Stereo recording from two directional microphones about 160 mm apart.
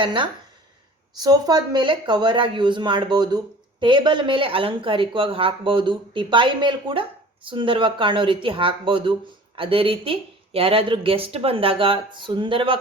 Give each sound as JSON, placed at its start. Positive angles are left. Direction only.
{"t": 0.0, "sound": "speech", "side_deg": -30}